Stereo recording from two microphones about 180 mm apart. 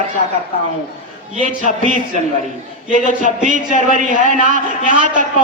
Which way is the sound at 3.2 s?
45° right (ahead or behind).